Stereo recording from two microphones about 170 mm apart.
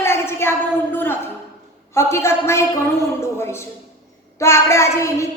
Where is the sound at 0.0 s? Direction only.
15° left (ahead or behind).